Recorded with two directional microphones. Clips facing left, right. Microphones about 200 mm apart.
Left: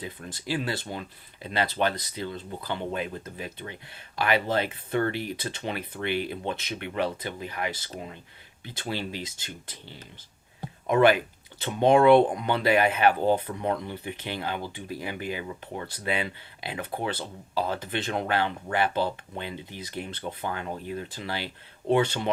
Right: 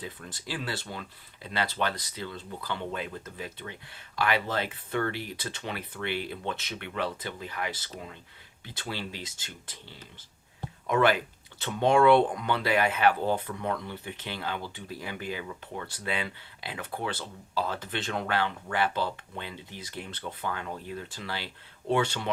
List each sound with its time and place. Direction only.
0.0 s speech: 20° left (ahead or behind)
10.8 s speech: 20° left (ahead or behind)